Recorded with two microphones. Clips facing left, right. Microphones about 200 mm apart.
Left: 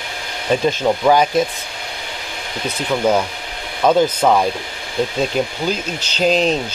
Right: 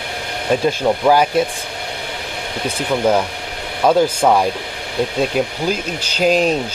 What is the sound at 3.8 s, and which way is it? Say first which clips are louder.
Speech: even; 10° right (ahead or behind).